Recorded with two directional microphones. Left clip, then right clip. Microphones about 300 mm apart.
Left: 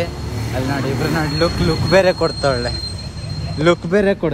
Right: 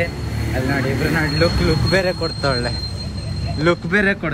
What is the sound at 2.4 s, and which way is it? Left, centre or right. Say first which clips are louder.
A man's voice: left 2 dB; centre.